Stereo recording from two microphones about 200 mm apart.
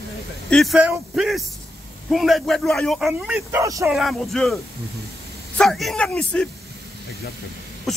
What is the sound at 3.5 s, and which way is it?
Speech, 15° right (ahead or behind).